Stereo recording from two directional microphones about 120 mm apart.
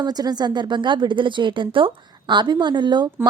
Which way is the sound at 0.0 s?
35° right (ahead or behind).